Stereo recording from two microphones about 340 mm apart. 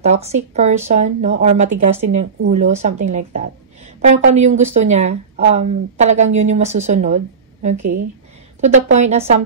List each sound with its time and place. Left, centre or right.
0.0 s speech: centre
8.5 s speech: centre